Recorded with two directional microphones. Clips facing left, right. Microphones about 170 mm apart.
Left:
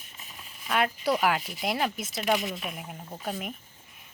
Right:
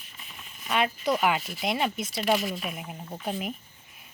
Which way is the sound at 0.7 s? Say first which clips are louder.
Even; 5° left (ahead or behind).